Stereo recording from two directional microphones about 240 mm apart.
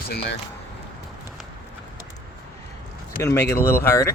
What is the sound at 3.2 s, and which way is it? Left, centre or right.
Speech, centre.